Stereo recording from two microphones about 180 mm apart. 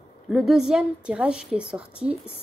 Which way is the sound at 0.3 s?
Centre (ahead or behind).